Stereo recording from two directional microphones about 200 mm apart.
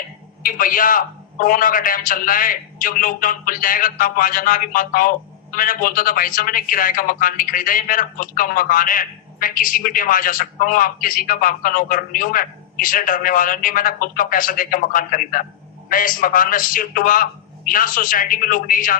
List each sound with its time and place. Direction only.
0.4 s a man's voice: 45° left (ahead or behind)